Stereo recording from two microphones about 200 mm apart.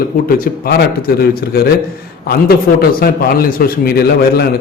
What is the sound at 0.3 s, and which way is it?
A man's voice, 45° left (ahead or behind).